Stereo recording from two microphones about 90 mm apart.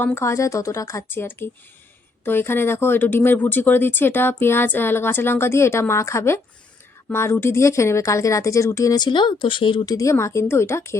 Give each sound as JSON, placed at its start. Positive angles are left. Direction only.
{"t": 0.0, "sound": "speech", "side_deg": 30}
{"t": 9.0, "sound": "speech", "side_deg": 60}
{"t": 9.8, "sound": "speech", "side_deg": 40}